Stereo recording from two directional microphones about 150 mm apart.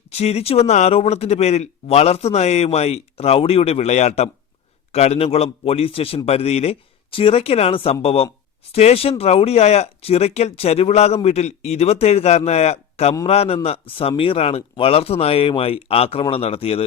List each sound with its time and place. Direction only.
0.1 s a man's voice: 45° left (ahead or behind)